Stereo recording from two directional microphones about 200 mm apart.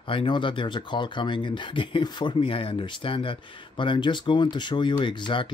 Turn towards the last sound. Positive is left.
turn(degrees=25)  # may be behind; listen again after turning